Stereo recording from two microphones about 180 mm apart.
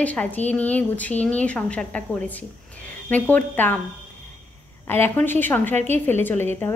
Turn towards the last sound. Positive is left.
turn(degrees=10)  # may be behind; listen again after turning